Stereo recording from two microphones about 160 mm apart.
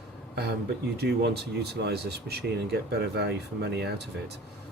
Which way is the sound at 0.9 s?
90° right.